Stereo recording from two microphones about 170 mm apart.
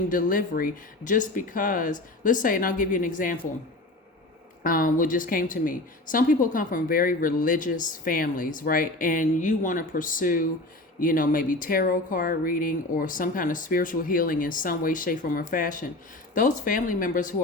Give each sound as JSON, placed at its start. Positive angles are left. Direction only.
{"t": 0.1, "sound": "a woman's voice", "side_deg": 55}
{"t": 4.6, "sound": "a woman's voice", "side_deg": 55}